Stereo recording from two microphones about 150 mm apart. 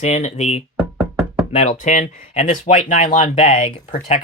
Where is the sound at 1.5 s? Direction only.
55° left (ahead or behind).